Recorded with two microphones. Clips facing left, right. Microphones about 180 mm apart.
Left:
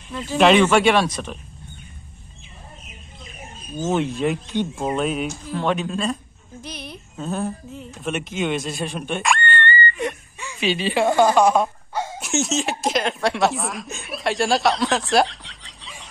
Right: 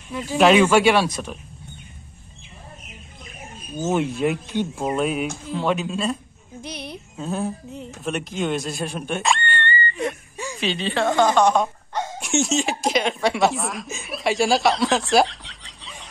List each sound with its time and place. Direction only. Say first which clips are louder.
0.1 s speech: even; 10° right (ahead or behind)
3.8 s speech: even; 5° right (ahead or behind)
6.6 s a woman's voice: right 2 dB; 60° right (ahead or behind)
7.2 s speech: even; centre (ahead or behind)
9.5 s a sound: left 3 dB; 20° right (ahead or behind)
10.3 s a sound: right 5 dB; 35° right (ahead or behind)
10.6 s speech: left 3 dB; 5° left (ahead or behind)